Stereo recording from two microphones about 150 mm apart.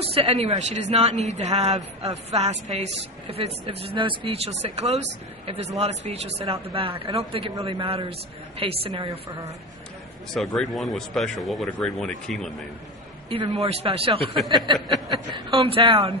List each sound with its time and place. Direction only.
0.0 s a man's voice: 40° right (ahead or behind)
10.3 s speech: centre (ahead or behind)
13.3 s a woman's voice: 35° right (ahead or behind)
14.4 s speech: centre (ahead or behind)
15.0 s a woman's voice: 35° right (ahead or behind)